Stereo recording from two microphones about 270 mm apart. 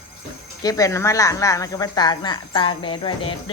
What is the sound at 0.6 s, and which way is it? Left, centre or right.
Speech, centre.